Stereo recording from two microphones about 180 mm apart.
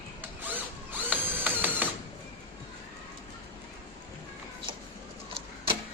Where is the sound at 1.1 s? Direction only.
10° right (ahead or behind).